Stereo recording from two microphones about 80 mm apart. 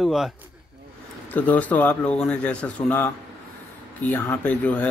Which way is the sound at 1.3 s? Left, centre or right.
Centre.